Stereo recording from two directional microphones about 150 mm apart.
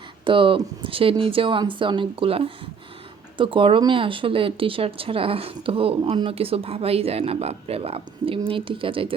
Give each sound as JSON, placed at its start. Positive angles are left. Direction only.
{"t": 0.3, "sound": "speech", "side_deg": -35}